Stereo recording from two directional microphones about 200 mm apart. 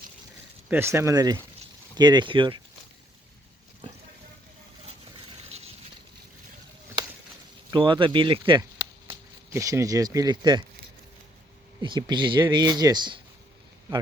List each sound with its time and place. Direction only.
0.7 s speech: 10° right (ahead or behind)
5.5 s a sound: 30° right (ahead or behind)
7.7 s speech: 25° right (ahead or behind)
11.8 s speech: 20° right (ahead or behind)